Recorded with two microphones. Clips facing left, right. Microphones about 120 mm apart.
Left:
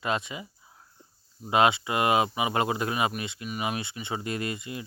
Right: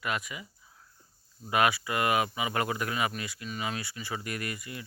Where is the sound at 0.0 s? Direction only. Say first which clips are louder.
Left 4 dB; 25° left (ahead or behind).